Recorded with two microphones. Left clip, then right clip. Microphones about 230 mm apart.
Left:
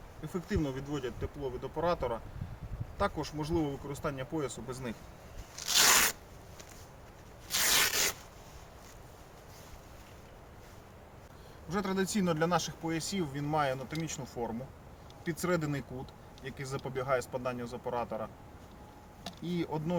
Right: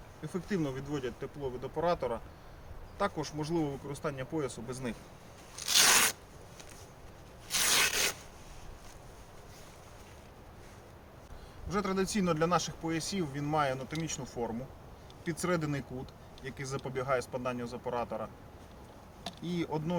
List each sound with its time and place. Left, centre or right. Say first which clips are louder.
0.2 s speech: even; centre
5.5 s tearing: even; centre
7.4 s zipper: even; centre
11.7 s speech: right 1 dB; centre